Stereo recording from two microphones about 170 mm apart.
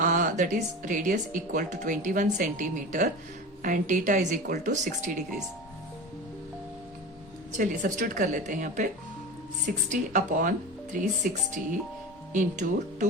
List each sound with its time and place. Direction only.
0.0 s speech: 50° right (ahead or behind)
7.5 s speech: 45° right (ahead or behind)
9.9 s speech: 50° right (ahead or behind)